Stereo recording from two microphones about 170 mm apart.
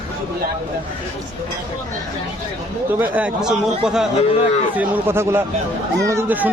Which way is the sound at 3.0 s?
10° right (ahead or behind).